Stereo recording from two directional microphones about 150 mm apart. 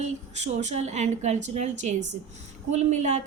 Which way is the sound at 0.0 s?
50° right (ahead or behind).